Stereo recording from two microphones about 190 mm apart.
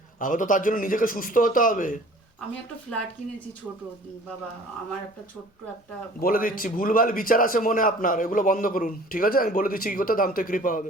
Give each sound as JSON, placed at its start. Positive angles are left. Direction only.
{"t": 0.2, "sound": "a man's voice", "side_deg": 45}
{"t": 6.1, "sound": "a man's voice", "side_deg": 50}